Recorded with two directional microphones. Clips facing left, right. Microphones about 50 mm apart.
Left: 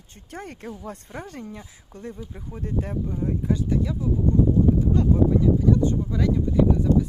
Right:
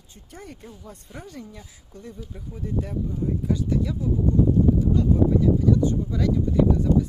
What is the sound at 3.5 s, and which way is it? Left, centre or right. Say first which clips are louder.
Speech: left 1 dB; left.